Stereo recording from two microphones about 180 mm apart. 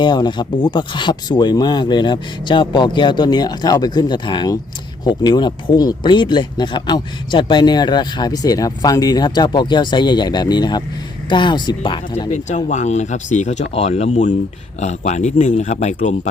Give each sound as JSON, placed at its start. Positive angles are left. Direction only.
{"t": 0.0, "sound": "speech", "side_deg": 25}
{"t": 12.5, "sound": "speech", "side_deg": 40}